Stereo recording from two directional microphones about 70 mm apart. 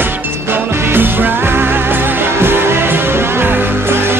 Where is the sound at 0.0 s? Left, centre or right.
Right.